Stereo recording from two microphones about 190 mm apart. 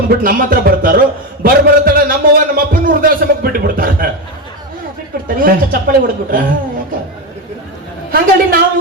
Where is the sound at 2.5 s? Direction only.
50° right (ahead or behind).